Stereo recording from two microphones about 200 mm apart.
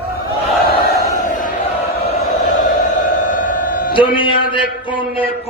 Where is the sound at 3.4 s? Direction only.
45° left (ahead or behind).